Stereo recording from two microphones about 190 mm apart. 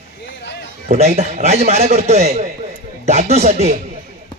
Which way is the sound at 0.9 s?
35° right (ahead or behind).